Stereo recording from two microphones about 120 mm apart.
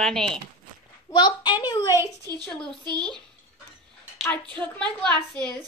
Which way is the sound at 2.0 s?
30° right (ahead or behind).